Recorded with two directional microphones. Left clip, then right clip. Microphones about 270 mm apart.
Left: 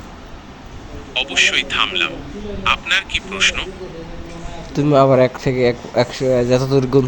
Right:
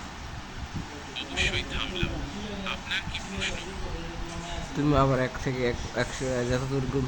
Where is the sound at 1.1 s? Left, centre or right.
Centre.